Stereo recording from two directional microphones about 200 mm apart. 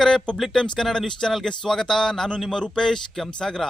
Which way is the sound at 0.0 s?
5° left (ahead or behind).